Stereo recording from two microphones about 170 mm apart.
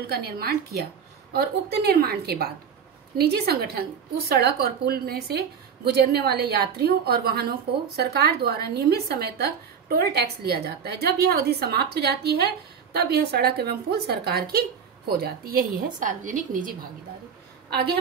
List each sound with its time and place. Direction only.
0.0 s a woman's voice: 65° right (ahead or behind)
17.6 s a woman's voice: 75° right (ahead or behind)